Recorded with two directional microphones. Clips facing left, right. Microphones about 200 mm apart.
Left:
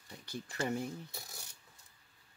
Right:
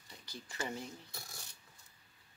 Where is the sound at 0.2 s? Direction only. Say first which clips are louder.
Left 5 dB; 55° left (ahead or behind).